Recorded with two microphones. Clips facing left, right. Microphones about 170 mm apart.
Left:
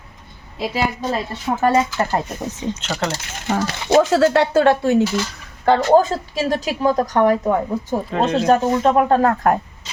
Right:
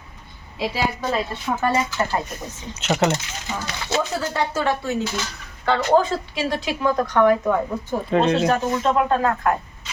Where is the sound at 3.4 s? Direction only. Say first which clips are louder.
Left 10 dB; 60° left (ahead or behind).